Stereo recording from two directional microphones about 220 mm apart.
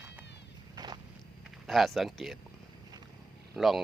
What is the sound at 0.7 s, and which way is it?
Walk, 20° right (ahead or behind).